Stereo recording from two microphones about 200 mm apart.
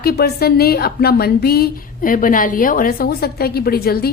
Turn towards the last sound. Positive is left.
turn(degrees=50)  # may be behind; listen again after turning